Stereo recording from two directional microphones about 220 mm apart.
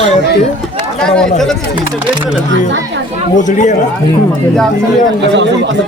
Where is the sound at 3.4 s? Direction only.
35° left (ahead or behind).